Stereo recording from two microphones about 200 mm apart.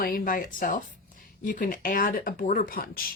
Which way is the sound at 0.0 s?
45° left (ahead or behind).